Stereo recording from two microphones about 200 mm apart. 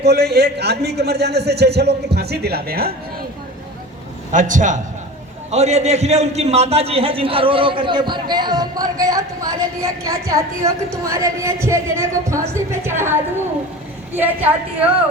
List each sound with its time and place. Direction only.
0.0 s a man's voice: 55° right (ahead or behind)
4.3 s a man's voice: 40° right (ahead or behind); by 13.1 s 10° right (ahead or behind)
14.2 s a woman's voice: 10° right (ahead or behind)